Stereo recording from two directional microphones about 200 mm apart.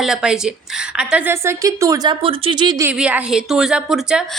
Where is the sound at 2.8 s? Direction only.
5° right (ahead or behind).